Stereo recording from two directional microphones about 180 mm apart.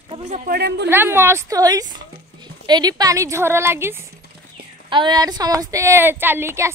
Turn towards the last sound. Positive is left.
turn(degrees=-15)  # may be behind; listen again after turning